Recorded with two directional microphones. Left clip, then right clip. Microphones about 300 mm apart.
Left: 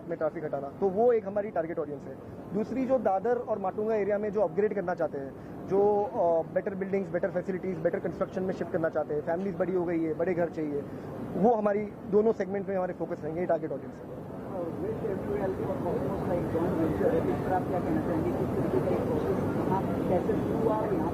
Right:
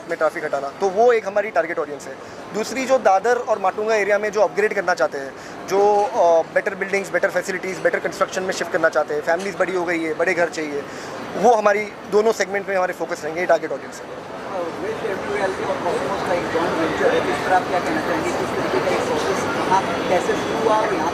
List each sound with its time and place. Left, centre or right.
0.1 s speech: centre
6.1 s speech: right
6.5 s speech: centre
14.5 s speech: centre